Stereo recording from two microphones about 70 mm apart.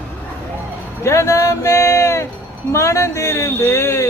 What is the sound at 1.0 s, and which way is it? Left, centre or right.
Speech, left.